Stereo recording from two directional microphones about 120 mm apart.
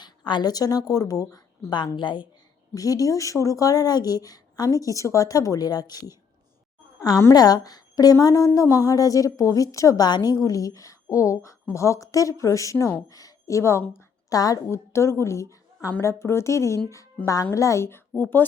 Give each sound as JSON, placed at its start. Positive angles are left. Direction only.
{"t": 0.0, "sound": "a woman's voice", "side_deg": 40}
{"t": 2.7, "sound": "a woman's voice", "side_deg": 30}
{"t": 13.1, "sound": "a woman's voice", "side_deg": 30}